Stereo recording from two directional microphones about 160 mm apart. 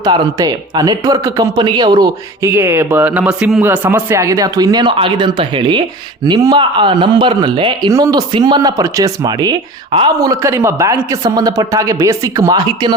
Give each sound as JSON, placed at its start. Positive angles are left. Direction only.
{"t": 0.0, "sound": "speech", "side_deg": -25}
{"t": 2.6, "sound": "speech", "side_deg": -15}
{"t": 10.2, "sound": "speech", "side_deg": -20}